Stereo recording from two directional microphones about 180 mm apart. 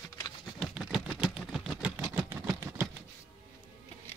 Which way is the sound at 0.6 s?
5° right (ahead or behind).